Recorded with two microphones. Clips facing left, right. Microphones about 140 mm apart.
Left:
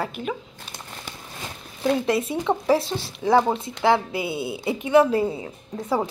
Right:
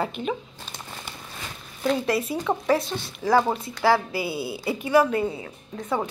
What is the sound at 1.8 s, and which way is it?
A woman's voice, 20° left (ahead or behind).